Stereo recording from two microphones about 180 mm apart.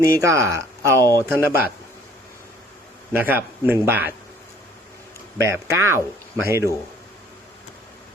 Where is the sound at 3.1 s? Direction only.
10° right (ahead or behind).